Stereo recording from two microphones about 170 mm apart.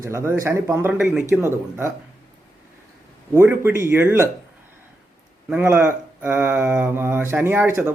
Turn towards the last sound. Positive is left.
turn(degrees=-15)  # may be behind; listen again after turning